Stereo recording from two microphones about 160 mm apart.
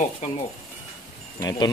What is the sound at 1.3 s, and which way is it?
Speech, 25° left (ahead or behind).